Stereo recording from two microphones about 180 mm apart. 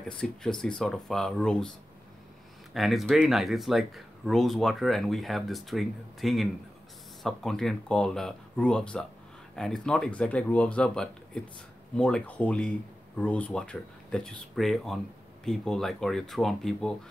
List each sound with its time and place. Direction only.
0.2 s speech: 5° left (ahead or behind)
2.7 s speech: centre (ahead or behind)